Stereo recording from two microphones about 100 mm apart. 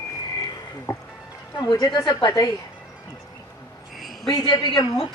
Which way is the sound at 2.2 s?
35° left (ahead or behind).